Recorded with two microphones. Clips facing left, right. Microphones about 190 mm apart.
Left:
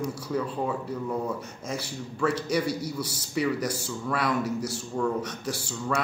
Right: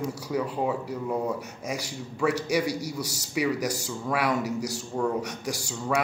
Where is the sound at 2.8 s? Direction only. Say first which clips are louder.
Even; 75° right (ahead or behind).